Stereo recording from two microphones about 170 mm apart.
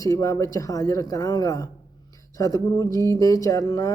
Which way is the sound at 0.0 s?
20° left (ahead or behind).